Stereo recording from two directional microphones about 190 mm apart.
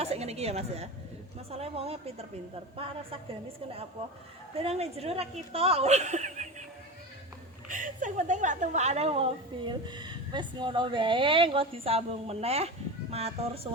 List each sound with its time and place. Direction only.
0.0 s a woman's voice: 35° right (ahead or behind)
4.5 s a woman's voice: 30° right (ahead or behind)
7.7 s a woman's voice: 45° right (ahead or behind)